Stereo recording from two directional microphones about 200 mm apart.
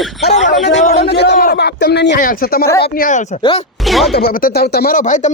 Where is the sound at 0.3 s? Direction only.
35° left (ahead or behind).